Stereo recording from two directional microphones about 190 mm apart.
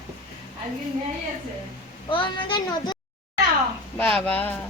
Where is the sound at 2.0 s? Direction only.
25° left (ahead or behind).